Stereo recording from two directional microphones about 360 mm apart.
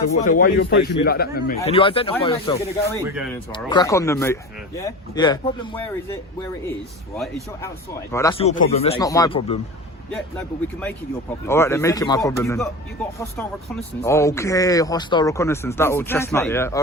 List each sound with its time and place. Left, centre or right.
0.3 s a man's voice: left
7.2 s speech: centre
11.4 s speech: centre